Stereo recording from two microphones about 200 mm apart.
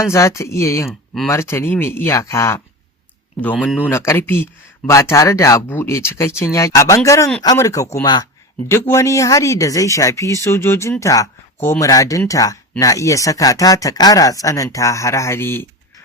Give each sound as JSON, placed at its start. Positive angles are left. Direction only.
{"t": 0.0, "sound": "speech", "side_deg": 15}
{"t": 0.9, "sound": "speech", "side_deg": 0}
{"t": 1.3, "sound": "speech", "side_deg": 15}